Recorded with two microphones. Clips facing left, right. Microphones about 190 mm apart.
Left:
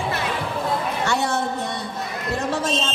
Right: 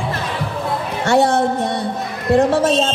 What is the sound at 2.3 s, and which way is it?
Music, 60° right (ahead or behind).